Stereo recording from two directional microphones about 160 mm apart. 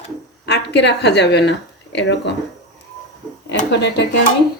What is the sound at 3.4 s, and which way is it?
Speech, 90° left.